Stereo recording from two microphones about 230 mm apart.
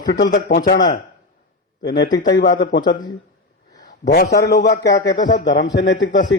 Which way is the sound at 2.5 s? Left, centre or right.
Left.